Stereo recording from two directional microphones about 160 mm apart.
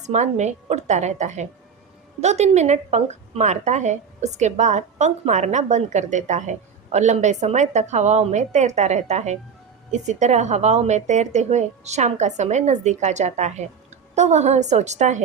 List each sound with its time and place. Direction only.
0.0 s a woman's voice: 45° right (ahead or behind)